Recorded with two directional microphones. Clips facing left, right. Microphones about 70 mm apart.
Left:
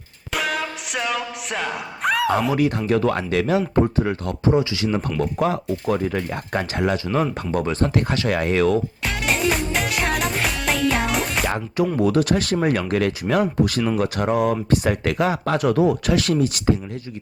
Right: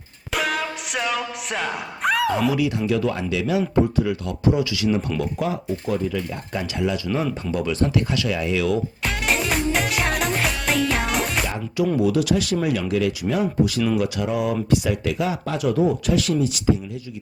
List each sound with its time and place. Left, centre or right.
0.3 s music: centre
2.6 s speech: left
5.2 s speech: left
7.5 s speech: left
9.0 s music: centre
11.4 s speech: left